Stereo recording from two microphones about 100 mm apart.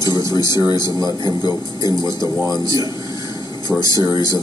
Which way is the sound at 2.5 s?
35° right (ahead or behind).